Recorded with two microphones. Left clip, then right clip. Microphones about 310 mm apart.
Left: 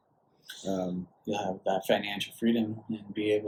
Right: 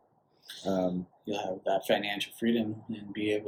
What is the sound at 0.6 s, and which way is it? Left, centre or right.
Speech, centre.